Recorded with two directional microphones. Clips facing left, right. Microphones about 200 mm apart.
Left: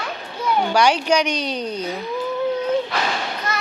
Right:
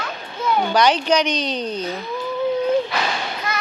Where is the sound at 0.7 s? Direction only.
10° left (ahead or behind).